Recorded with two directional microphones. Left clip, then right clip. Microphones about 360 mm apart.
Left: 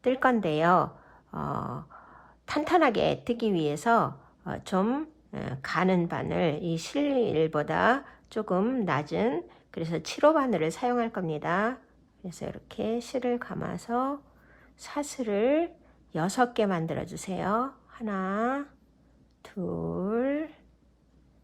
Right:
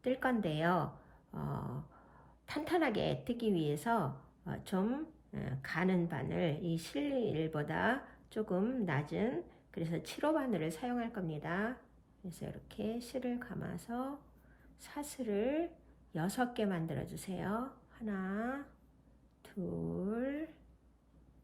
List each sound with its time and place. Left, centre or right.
0.0 s a woman's voice: centre
20.0 s a woman's voice: centre